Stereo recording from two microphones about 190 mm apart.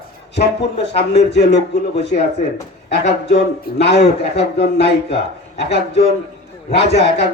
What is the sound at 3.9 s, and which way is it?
Speech, 60° left (ahead or behind).